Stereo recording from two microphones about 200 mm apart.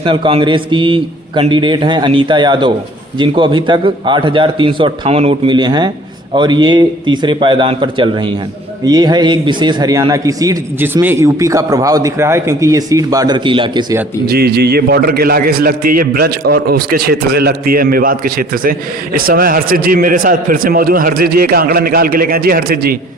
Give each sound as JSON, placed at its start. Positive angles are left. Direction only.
{"t": 0.0, "sound": "a man's voice", "side_deg": -25}
{"t": 14.3, "sound": "a man's voice", "side_deg": -50}